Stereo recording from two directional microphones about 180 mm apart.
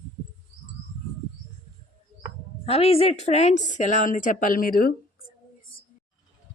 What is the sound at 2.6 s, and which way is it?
A woman's voice, 35° left (ahead or behind).